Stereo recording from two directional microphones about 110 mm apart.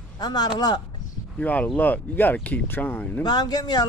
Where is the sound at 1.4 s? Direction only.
10° left (ahead or behind).